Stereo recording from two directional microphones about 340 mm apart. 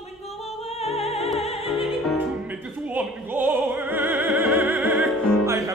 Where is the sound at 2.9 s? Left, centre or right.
Centre.